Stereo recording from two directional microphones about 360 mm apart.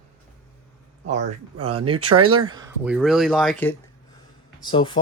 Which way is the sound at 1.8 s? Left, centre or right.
Right.